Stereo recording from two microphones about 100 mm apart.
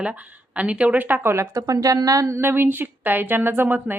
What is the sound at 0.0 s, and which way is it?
Speech, 15° right (ahead or behind).